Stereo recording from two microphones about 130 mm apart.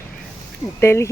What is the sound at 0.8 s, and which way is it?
Speech, 20° left (ahead or behind).